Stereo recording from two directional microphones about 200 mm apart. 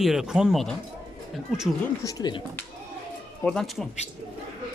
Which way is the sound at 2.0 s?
20° left (ahead or behind).